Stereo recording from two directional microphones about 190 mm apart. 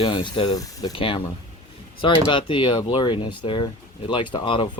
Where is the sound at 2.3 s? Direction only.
25° left (ahead or behind).